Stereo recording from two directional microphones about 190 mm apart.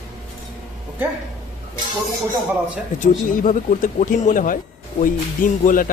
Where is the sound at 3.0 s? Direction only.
45° left (ahead or behind).